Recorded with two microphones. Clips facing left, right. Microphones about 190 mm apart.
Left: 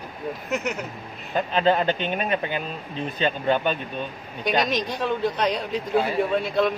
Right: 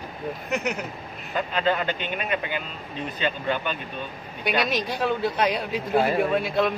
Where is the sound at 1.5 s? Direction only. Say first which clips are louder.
Left 4 dB; 30° left (ahead or behind).